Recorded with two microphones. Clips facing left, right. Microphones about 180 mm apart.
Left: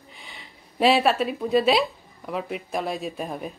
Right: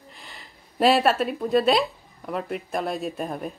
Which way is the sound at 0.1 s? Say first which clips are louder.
Left 3 dB; centre (ahead or behind).